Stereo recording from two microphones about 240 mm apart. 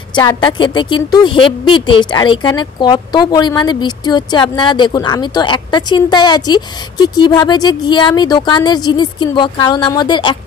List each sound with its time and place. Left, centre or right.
0.1 s a woman's voice: centre